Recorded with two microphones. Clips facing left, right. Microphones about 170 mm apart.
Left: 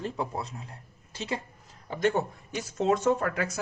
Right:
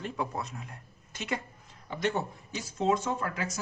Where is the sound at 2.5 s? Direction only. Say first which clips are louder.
Left 2 dB; 60° left (ahead or behind).